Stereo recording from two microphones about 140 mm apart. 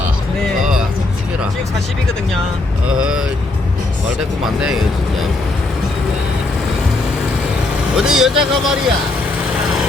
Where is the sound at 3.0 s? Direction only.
5° right (ahead or behind).